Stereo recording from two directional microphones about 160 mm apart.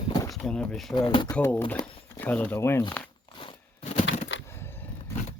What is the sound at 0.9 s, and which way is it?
Speech, 30° left (ahead or behind).